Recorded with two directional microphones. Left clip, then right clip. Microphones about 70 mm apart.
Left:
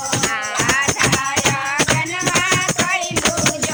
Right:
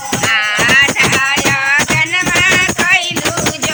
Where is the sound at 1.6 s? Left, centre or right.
Centre.